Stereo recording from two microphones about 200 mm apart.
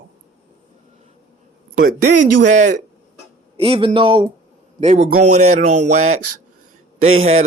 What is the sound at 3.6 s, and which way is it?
Speech, 25° right (ahead or behind).